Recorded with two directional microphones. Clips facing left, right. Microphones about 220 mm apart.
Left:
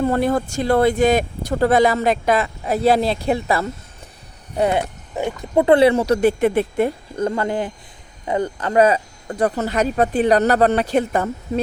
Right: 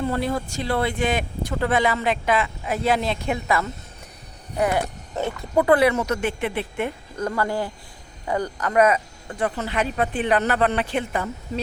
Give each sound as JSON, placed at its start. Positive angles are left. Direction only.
{"t": 0.0, "sound": "speech", "side_deg": 50}
{"t": 5.1, "sound": "speech", "side_deg": 15}
{"t": 5.5, "sound": "speech", "side_deg": 25}